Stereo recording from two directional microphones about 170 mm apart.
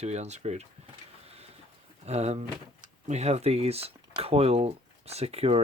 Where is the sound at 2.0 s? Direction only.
40° right (ahead or behind).